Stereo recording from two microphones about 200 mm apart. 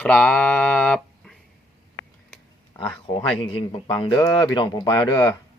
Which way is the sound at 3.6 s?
25° left (ahead or behind).